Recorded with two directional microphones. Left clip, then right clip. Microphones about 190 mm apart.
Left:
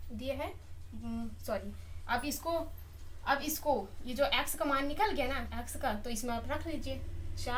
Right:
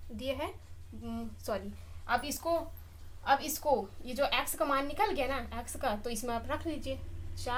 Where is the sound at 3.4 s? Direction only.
50° right (ahead or behind).